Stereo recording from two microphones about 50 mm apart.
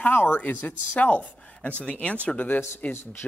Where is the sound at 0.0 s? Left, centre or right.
Left.